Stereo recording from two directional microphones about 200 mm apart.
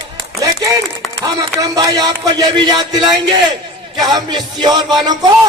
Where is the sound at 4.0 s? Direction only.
20° right (ahead or behind).